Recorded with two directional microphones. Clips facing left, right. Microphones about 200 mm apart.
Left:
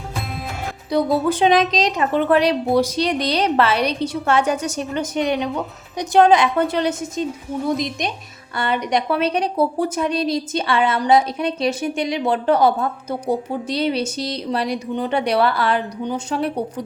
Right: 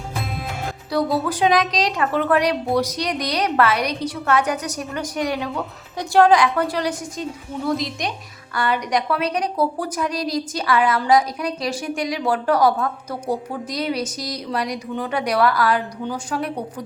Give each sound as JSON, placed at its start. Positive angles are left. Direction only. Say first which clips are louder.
{"t": 0.9, "sound": "speech", "louder": "left 3 dB", "side_deg": 20}